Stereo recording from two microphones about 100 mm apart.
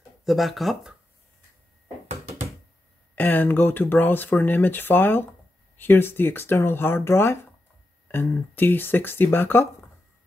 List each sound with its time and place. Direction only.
0.2 s speech: centre (ahead or behind)
3.2 s speech: 20° left (ahead or behind)